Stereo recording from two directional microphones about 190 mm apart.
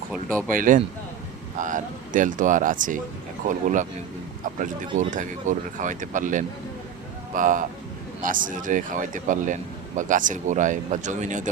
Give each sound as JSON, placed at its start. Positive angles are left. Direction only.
{"t": 0.4, "sound": "speech", "side_deg": -45}